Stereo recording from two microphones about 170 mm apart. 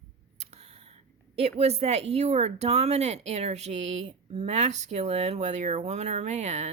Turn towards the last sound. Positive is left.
turn(degrees=-40)  # may be behind; listen again after turning